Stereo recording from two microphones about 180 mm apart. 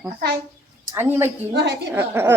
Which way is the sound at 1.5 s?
70° right (ahead or behind).